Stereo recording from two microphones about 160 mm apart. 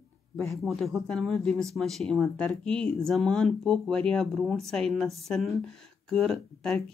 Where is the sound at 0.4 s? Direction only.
Centre (ahead or behind).